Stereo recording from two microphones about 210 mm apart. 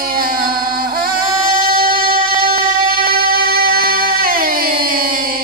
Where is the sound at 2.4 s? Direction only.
45° right (ahead or behind).